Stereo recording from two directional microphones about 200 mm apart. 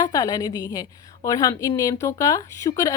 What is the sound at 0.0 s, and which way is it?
A woman's voice, 20° left (ahead or behind).